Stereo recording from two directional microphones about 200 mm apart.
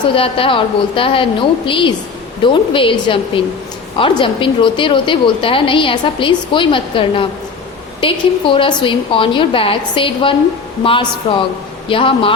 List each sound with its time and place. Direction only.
0.0 s a woman's voice: 25° left (ahead or behind)